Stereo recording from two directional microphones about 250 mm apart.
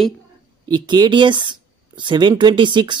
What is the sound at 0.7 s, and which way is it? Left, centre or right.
Speech, centre.